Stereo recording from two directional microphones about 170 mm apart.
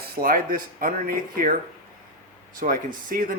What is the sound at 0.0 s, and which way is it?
Speech, 60° right (ahead or behind).